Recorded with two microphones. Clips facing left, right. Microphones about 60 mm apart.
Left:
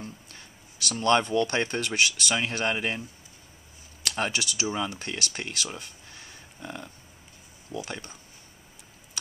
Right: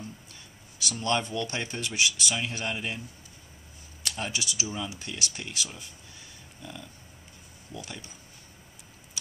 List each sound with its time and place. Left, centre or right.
0.0 s speech: left
4.0 s speech: left